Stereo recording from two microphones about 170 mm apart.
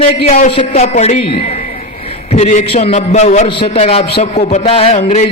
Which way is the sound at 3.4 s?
30° left (ahead or behind).